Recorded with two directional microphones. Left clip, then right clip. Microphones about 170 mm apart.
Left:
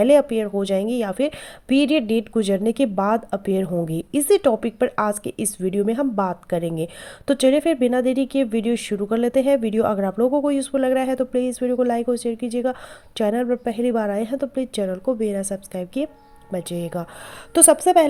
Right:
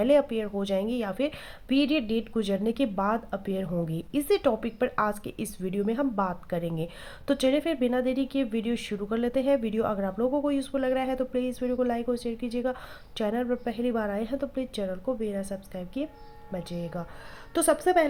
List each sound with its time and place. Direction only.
0.0 s a woman's voice: 35° left (ahead or behind)